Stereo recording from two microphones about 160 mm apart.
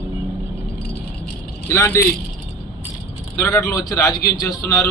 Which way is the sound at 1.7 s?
20° left (ahead or behind).